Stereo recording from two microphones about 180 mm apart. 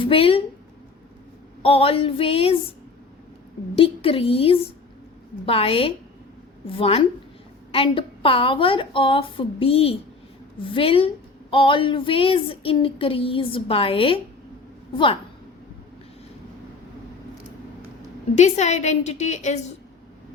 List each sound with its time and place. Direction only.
0.0 s speech: 30° left (ahead or behind)
1.6 s a woman's voice: 30° left (ahead or behind)
3.8 s a woman's voice: 30° left (ahead or behind)
7.7 s a sound: 30° left (ahead or behind)
10.6 s a woman's voice: 30° left (ahead or behind)
11.5 s a sound: 30° left (ahead or behind)
18.3 s a woman's voice: 40° left (ahead or behind)